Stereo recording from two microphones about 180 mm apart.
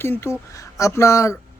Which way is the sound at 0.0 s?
15° left (ahead or behind).